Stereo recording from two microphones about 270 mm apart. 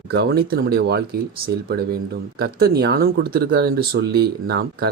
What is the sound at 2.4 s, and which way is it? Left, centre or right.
Speech, right.